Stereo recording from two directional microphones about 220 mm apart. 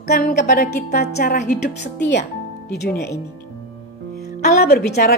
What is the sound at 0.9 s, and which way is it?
Speech, 45° left (ahead or behind).